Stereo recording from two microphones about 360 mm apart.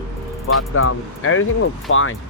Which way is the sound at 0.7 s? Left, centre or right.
Left.